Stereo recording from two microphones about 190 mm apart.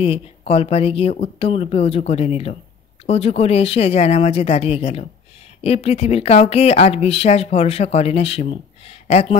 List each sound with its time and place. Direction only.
0.0 s speech: 30° left (ahead or behind)